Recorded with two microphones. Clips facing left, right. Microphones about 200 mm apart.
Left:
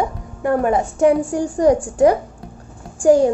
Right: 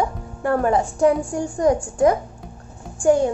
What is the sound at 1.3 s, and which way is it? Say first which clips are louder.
A woman's voice: left 4 dB; 35° left (ahead or behind).